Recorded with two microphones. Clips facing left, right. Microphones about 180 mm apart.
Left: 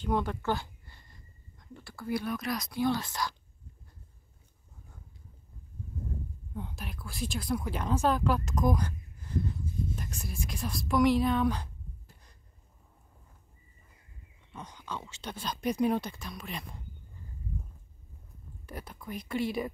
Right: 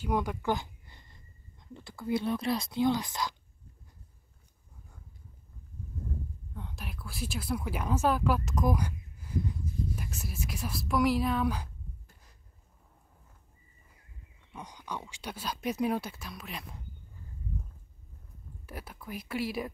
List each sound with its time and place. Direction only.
0.0 s speech: 10° right (ahead or behind)
6.5 s speech: 5° left (ahead or behind)
12.1 s a sound: 5° right (ahead or behind)
14.5 s speech: 15° right (ahead or behind)
18.7 s speech: 5° right (ahead or behind)